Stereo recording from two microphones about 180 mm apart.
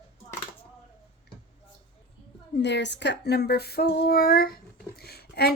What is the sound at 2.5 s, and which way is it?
A woman's voice, 75° left (ahead or behind).